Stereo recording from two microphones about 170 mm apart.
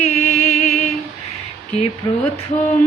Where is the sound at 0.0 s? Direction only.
40° left (ahead or behind).